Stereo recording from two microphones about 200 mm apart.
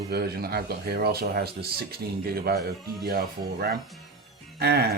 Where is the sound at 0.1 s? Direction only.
50° right (ahead or behind).